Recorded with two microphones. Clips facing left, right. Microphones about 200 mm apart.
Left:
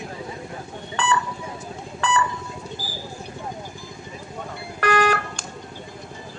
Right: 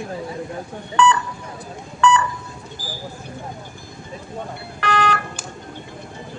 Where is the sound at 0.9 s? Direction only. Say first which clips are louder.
Right 7 dB; 35° left (ahead or behind).